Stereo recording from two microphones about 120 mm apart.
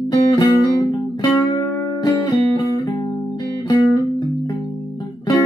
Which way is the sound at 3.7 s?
35° left (ahead or behind).